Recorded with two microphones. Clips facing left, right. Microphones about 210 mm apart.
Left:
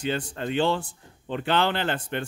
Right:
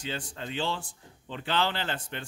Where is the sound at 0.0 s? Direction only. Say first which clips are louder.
Left 8 dB; 60° left (ahead or behind).